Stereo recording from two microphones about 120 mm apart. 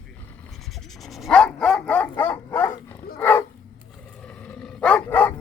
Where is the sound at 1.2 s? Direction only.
5° left (ahead or behind).